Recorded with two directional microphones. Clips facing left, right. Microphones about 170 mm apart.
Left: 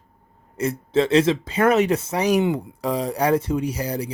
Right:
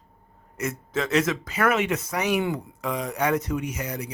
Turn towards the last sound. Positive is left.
turn(degrees=35)  # may be behind; listen again after turning